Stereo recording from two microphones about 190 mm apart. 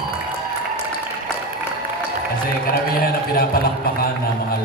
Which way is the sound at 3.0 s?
50° left (ahead or behind).